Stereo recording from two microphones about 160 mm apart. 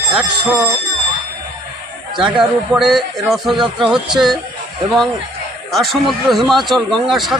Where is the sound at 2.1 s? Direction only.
30° right (ahead or behind).